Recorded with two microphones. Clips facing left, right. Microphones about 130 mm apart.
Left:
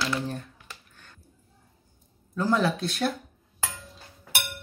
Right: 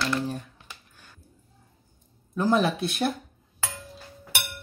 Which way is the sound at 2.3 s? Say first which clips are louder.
Right 2 dB; 20° right (ahead or behind).